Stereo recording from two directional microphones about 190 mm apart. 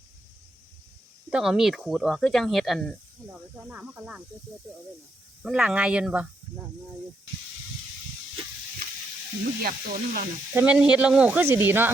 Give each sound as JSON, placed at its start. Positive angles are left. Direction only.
{"t": 1.3, "sound": "speech", "side_deg": -5}
{"t": 5.4, "sound": "speech", "side_deg": -5}
{"t": 9.6, "sound": "speech", "side_deg": -50}
{"t": 10.5, "sound": "speech", "side_deg": -10}